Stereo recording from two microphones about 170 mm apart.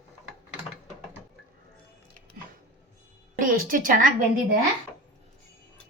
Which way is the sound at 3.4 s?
55° right (ahead or behind).